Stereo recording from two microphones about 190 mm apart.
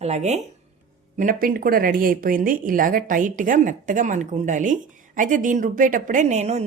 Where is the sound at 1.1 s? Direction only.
45° right (ahead or behind).